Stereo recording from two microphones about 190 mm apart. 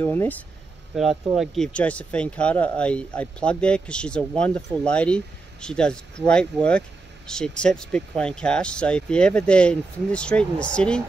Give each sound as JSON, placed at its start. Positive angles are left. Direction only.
{"t": 0.0, "sound": "speech", "side_deg": 10}
{"t": 0.9, "sound": "speech", "side_deg": 0}